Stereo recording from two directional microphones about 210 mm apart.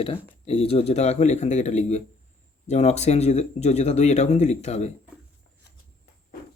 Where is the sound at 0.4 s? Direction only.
30° left (ahead or behind).